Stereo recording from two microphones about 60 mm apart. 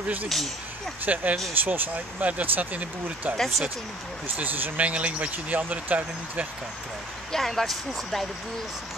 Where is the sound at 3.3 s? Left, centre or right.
Centre.